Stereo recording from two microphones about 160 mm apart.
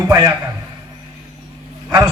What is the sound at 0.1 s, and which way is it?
Speech, 20° right (ahead or behind).